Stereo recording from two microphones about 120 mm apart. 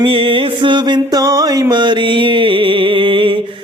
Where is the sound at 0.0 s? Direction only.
45° right (ahead or behind).